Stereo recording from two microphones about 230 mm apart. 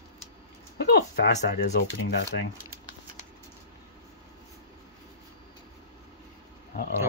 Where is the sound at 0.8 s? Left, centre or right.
Left.